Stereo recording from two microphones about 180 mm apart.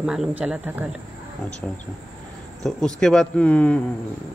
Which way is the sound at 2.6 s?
5° left (ahead or behind).